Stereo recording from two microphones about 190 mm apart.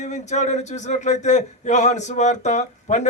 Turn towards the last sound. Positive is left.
turn(degrees=40)  # may be behind; listen again after turning